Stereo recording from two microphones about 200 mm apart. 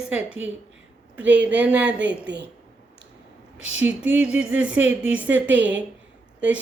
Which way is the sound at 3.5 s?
75° right (ahead or behind).